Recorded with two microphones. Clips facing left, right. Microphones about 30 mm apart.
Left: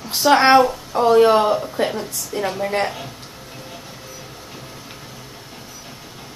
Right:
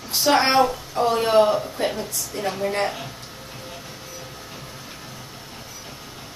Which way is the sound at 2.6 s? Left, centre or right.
Centre.